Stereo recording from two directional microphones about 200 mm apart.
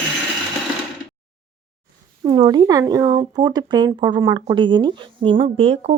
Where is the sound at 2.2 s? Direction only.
20° right (ahead or behind).